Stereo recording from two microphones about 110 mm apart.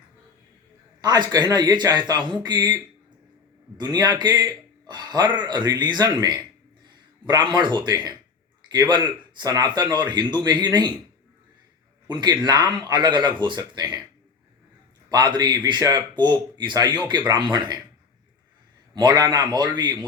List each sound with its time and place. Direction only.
1.0 s a man's voice: 40° right (ahead or behind)
12.0 s speech: 40° right (ahead or behind)
15.1 s speech: 40° right (ahead or behind)
18.9 s speech: 40° right (ahead or behind)